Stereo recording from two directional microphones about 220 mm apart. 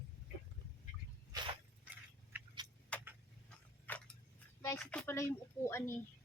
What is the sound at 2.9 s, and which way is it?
Tick-tock, 5° left (ahead or behind).